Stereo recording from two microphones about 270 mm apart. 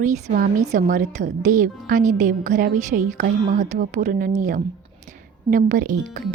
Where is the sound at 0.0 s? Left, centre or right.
Right.